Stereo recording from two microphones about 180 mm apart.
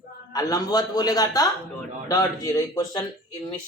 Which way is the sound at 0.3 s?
20° left (ahead or behind).